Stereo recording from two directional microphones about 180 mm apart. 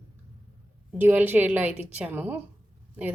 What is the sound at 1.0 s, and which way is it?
A woman's voice, 10° right (ahead or behind).